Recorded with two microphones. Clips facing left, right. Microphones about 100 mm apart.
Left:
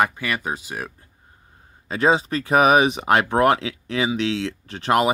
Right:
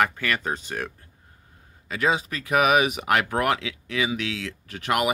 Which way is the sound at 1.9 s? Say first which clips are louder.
Left 5 dB; 30° left (ahead or behind).